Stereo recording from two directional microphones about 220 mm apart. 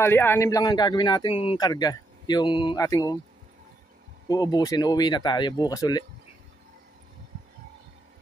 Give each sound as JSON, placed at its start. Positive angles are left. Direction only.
{"t": 0.0, "sound": "speech", "side_deg": 10}
{"t": 4.3, "sound": "speech", "side_deg": 15}